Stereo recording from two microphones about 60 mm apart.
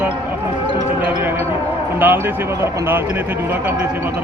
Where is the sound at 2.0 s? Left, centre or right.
Right.